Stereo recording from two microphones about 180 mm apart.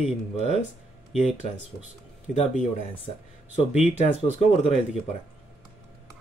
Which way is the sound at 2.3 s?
35° left (ahead or behind).